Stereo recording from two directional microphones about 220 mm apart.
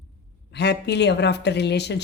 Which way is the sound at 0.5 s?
50° left (ahead or behind).